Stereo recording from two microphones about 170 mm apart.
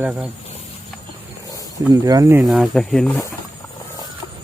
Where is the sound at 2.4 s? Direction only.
Centre (ahead or behind).